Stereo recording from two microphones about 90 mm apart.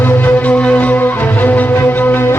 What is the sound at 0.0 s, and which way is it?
Music, 20° left (ahead or behind).